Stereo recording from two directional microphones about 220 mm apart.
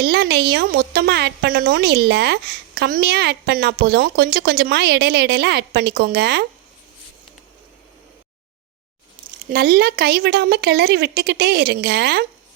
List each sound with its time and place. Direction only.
0.0 s speech: 50° right (ahead or behind)
9.5 s speech: 45° right (ahead or behind)